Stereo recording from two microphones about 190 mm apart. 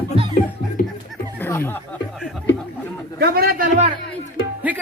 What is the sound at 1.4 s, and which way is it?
Speech, 15° left (ahead or behind).